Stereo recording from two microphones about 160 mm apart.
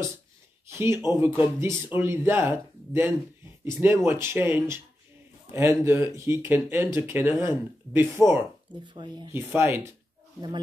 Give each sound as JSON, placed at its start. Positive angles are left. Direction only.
{"t": 0.7, "sound": "speech", "side_deg": -15}
{"t": 8.8, "sound": "speech", "side_deg": -30}
{"t": 9.3, "sound": "speech", "side_deg": -15}